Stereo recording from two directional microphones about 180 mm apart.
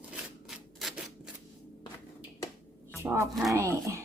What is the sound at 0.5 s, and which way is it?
Rub, centre (ahead or behind).